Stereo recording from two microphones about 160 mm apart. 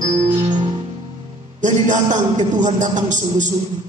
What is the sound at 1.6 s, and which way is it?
A man's voice, 50° right (ahead or behind).